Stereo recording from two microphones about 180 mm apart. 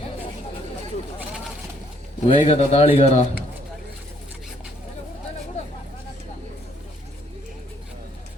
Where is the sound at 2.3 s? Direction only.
30° left (ahead or behind).